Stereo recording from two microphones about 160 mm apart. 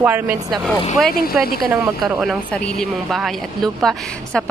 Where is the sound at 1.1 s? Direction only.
70° left (ahead or behind).